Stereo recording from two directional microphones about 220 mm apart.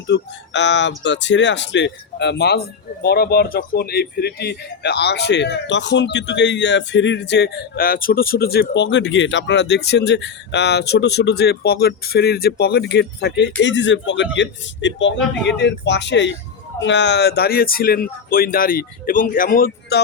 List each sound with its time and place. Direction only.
0.1 s speech: 55° left (ahead or behind)